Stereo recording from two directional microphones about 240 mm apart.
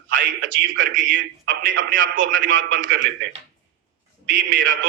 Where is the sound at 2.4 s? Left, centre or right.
Right.